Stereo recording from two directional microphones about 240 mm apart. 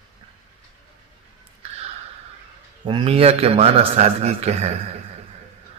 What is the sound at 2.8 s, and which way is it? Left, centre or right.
Speech, centre.